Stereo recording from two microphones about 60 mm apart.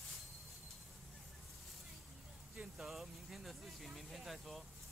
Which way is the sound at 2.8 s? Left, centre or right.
Centre.